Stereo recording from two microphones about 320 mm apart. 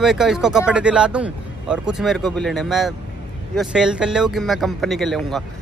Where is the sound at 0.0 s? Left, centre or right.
Centre.